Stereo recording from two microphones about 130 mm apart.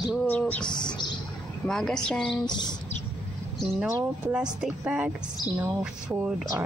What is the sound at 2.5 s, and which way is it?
Speech, 35° left (ahead or behind).